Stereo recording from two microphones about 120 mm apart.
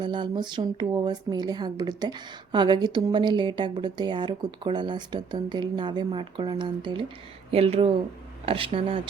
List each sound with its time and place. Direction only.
0.0 s speech: 40° right (ahead or behind)
7.5 s speech: 55° right (ahead or behind)